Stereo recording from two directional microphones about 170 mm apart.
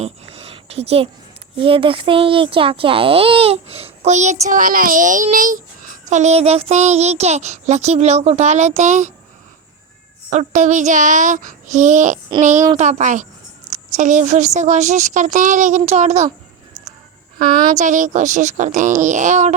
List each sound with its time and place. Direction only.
0.0 s a sound: 35° right (ahead or behind)
1.5 s a child's voice: 30° right (ahead or behind)
10.2 s a woman's voice: 45° right (ahead or behind)
17.3 s a woman's voice: 25° right (ahead or behind)
17.7 s a woman's voice: 50° right (ahead or behind)